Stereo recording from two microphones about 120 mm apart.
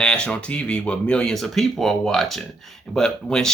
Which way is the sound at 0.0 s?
10° left (ahead or behind).